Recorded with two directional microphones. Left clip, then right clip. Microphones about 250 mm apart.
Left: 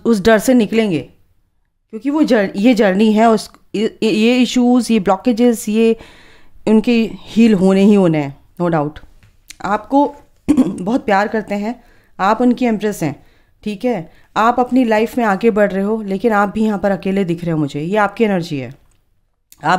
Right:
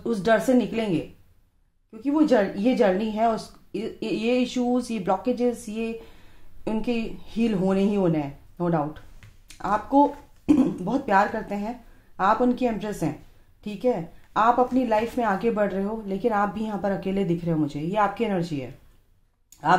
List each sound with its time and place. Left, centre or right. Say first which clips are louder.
0.0 s speech: left 9 dB; left
19.5 s clicking: left 5 dB; left